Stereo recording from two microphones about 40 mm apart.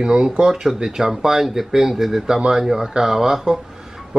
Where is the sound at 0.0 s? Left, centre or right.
Right.